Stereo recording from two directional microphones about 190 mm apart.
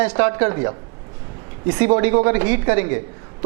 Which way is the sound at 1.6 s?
15° right (ahead or behind).